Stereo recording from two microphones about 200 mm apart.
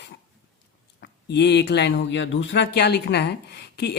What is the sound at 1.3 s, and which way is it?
Speech, 60° left (ahead or behind).